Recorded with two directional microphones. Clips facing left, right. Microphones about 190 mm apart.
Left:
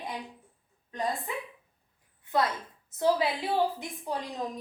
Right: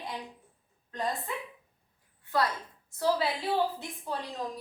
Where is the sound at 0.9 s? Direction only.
15° left (ahead or behind).